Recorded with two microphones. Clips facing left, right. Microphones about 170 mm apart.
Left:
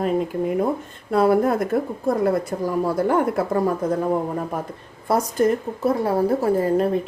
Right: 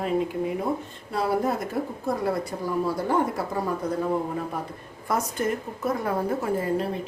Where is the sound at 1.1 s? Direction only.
55° left (ahead or behind).